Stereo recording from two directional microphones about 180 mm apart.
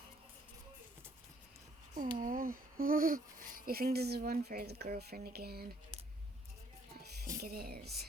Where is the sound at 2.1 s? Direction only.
50° right (ahead or behind).